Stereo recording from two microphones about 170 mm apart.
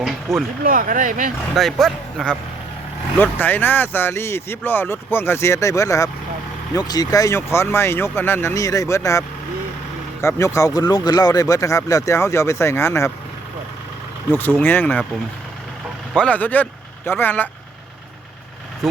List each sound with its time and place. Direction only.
0.3 s speech: centre (ahead or behind)
0.6 s speech: 55° right (ahead or behind)
1.5 s speech: centre (ahead or behind)
14.6 s speech: 10° left (ahead or behind)
16.1 s speech: 5° left (ahead or behind)